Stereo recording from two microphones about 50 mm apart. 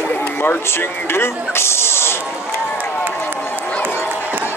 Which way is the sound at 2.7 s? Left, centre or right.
Right.